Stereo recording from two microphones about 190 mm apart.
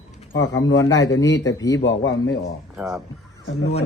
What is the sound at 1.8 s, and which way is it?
Speech, 80° left.